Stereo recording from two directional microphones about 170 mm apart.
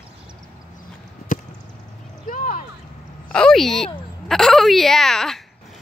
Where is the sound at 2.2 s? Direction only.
50° left (ahead or behind).